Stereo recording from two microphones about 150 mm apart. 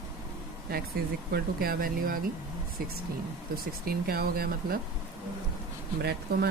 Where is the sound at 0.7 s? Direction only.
90° right; by 2.2 s 75° right (ahead or behind).